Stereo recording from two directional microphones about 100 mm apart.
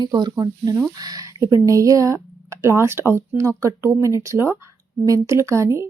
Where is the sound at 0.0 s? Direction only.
45° right (ahead or behind).